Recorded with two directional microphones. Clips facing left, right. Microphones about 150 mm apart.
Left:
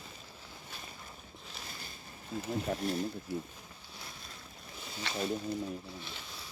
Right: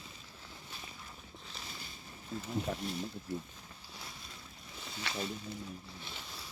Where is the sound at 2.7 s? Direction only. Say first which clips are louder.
Left 3 dB; 65° left (ahead or behind).